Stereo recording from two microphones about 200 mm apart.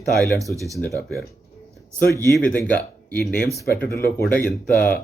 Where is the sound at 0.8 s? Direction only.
15° left (ahead or behind).